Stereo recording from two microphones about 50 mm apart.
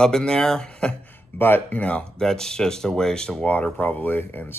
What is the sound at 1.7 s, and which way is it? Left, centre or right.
Speech, left.